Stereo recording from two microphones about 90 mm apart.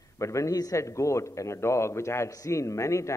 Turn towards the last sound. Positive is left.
turn(degrees=35)  # may be behind; listen again after turning